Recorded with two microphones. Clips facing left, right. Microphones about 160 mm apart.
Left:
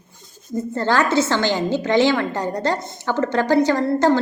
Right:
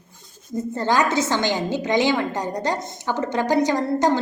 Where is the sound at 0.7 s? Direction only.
15° right (ahead or behind).